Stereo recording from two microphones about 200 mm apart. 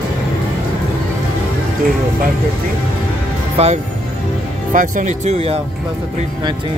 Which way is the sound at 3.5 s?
35° right (ahead or behind).